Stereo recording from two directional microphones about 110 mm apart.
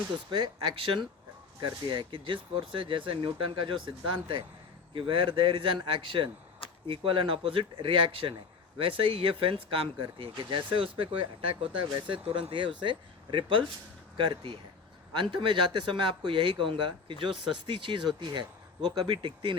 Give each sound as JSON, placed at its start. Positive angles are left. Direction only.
{"t": 0.3, "sound": "speech", "side_deg": -45}